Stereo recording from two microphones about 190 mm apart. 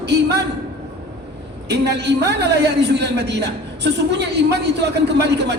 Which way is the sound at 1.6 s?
60° right (ahead or behind).